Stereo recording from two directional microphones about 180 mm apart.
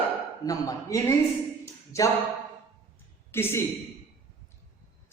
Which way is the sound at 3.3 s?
15° left (ahead or behind).